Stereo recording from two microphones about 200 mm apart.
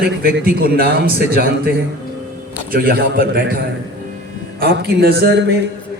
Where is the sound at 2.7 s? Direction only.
50° right (ahead or behind).